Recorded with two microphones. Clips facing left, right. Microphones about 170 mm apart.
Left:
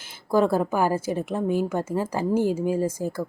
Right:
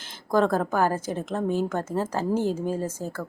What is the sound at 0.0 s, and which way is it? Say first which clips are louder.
A woman's voice: left 1 dB; 10° left (ahead or behind).